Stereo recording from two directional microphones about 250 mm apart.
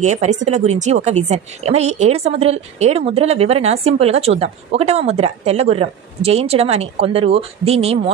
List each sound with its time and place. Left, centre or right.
0.0 s speech: right